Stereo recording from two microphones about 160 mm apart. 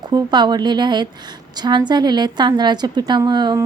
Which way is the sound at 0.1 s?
25° right (ahead or behind).